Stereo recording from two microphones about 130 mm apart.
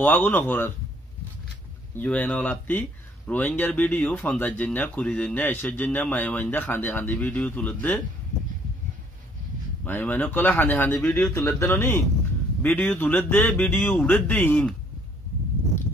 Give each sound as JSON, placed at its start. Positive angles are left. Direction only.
{"t": 0.0, "sound": "speech", "side_deg": 15}
{"t": 2.0, "sound": "speech", "side_deg": 10}
{"t": 9.8, "sound": "speech", "side_deg": 15}